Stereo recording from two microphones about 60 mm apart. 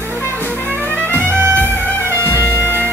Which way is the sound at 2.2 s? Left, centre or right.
Left.